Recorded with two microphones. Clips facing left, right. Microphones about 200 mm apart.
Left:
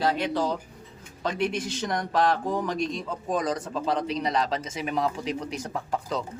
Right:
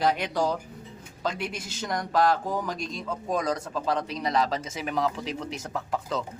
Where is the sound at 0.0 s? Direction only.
15° right (ahead or behind); by 5.4 s centre (ahead or behind).